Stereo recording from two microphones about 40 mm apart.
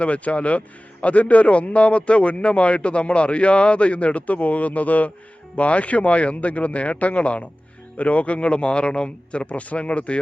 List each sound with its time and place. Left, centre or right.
0.0 s a man's voice: left